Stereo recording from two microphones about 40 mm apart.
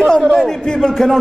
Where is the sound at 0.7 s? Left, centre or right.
Centre.